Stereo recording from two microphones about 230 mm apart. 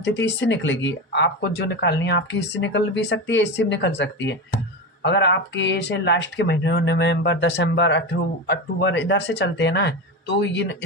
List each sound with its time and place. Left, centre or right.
0.0 s speech: left